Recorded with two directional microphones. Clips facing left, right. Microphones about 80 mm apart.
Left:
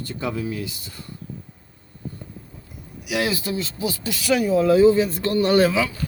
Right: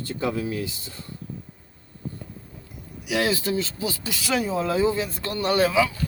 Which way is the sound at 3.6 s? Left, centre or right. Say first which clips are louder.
Left 1 dB; left.